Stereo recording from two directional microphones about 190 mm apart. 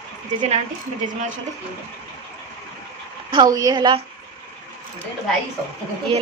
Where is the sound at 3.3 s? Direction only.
20° right (ahead or behind).